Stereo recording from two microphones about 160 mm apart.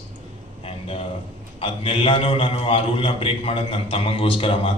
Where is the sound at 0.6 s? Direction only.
35° left (ahead or behind).